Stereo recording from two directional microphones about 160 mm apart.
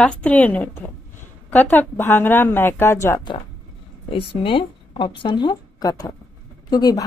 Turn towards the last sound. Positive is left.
turn(degrees=25)  # may be behind; listen again after turning